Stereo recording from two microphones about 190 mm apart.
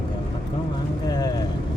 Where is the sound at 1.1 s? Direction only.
20° left (ahead or behind).